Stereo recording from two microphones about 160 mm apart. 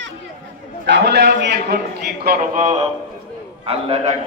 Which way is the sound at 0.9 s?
90° right.